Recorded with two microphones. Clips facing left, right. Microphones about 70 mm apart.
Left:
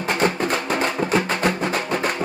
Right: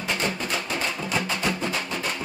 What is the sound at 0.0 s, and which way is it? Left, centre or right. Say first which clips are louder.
Music: left 7 dB; left.